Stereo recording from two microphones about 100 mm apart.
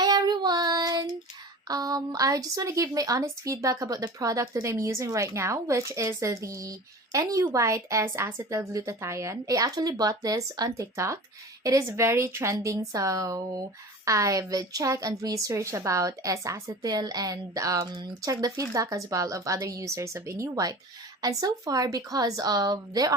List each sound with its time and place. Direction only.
0.0 s child singing: 45° right (ahead or behind)
1.6 s a woman's voice: 40° right (ahead or behind)